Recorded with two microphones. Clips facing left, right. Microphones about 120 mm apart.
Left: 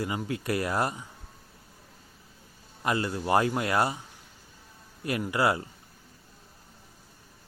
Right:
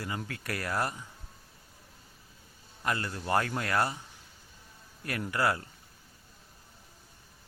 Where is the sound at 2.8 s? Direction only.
20° left (ahead or behind).